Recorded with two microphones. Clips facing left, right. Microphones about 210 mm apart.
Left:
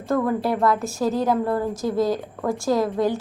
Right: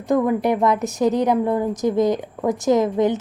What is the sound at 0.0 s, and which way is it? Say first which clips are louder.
A woman's voice: right 3 dB; 15° right (ahead or behind).